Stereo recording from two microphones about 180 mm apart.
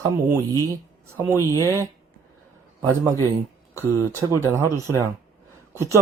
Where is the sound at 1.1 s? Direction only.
15° right (ahead or behind).